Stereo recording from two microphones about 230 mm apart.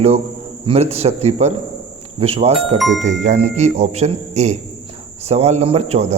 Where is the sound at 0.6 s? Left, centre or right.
Right.